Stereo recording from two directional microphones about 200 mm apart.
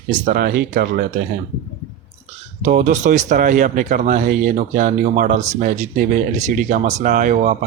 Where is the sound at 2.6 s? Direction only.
40° right (ahead or behind).